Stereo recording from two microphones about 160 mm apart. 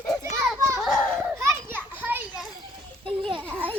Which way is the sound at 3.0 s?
35° right (ahead or behind).